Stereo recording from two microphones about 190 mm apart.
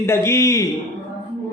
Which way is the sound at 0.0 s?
15° left (ahead or behind).